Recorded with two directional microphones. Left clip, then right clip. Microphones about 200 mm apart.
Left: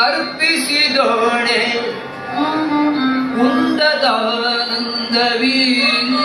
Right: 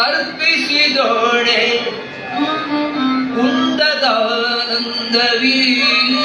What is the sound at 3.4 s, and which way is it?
Music, 15° left (ahead or behind).